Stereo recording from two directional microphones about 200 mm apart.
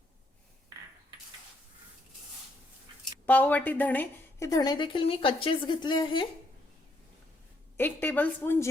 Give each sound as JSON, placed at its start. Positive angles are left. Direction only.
{"t": 3.2, "sound": "a woman's voice", "side_deg": 10}
{"t": 7.8, "sound": "a woman's voice", "side_deg": 10}